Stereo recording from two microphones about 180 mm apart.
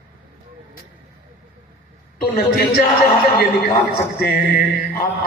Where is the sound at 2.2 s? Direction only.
60° left (ahead or behind).